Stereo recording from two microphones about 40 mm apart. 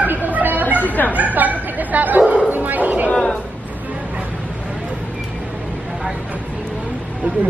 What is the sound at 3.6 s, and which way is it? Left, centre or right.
Vehicle, right.